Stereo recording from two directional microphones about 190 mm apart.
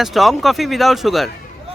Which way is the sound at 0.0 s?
Centre (ahead or behind).